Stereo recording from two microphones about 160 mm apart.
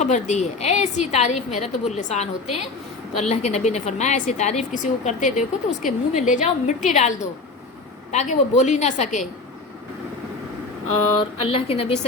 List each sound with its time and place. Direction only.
0.0 s a woman's voice: 45° left (ahead or behind)
8.1 s a woman's voice: 45° left (ahead or behind)
11.2 s a woman's voice: 35° left (ahead or behind)